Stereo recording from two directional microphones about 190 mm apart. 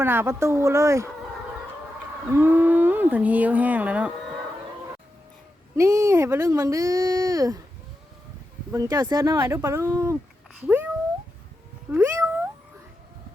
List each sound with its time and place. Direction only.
0.0 s speech: 10° right (ahead or behind)
2.3 s speech: 10° right (ahead or behind)
5.7 s speech: 15° right (ahead or behind)
8.7 s speech: 20° right (ahead or behind)
11.9 s cat: 15° right (ahead or behind)